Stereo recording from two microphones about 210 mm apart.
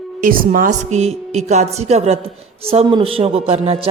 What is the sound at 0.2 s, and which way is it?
Speech, 40° right (ahead or behind).